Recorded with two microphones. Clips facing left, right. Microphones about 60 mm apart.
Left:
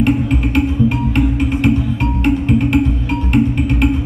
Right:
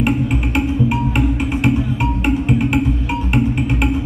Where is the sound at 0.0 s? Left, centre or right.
Centre.